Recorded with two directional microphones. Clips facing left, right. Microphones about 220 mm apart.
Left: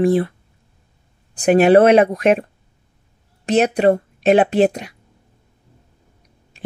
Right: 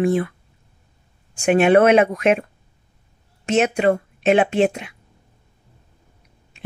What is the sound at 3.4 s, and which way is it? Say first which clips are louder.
Speech: left 3 dB; 35° left (ahead or behind).